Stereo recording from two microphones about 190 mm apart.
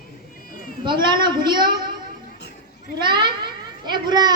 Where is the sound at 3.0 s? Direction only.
25° right (ahead or behind).